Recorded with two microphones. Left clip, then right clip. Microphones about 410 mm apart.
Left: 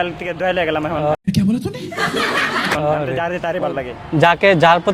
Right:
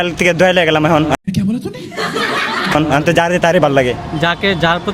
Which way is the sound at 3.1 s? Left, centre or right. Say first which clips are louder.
Right 9 dB; right.